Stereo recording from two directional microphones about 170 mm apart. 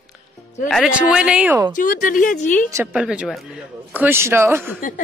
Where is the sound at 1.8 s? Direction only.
55° left (ahead or behind).